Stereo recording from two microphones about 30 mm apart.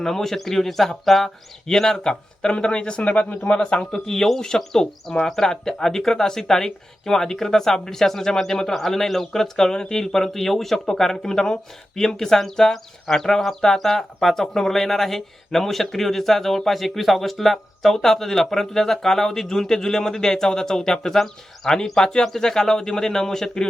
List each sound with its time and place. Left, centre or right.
0.0 s speech: centre
2.4 s speech: left
3.1 s speech: left
3.9 s speech: centre